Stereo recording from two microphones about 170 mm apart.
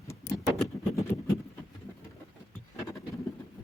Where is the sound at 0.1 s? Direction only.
20° left (ahead or behind).